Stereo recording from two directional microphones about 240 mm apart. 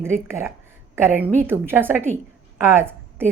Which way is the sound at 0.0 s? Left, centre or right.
Centre.